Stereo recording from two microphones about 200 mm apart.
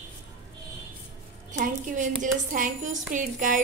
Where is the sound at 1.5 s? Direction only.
40° right (ahead or behind).